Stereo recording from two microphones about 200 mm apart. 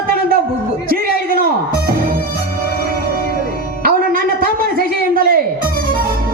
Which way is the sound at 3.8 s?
45° right (ahead or behind).